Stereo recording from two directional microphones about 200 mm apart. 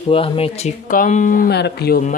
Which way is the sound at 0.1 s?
30° left (ahead or behind).